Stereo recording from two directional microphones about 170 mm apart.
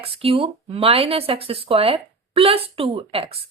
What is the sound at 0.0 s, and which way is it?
Speech, 35° right (ahead or behind).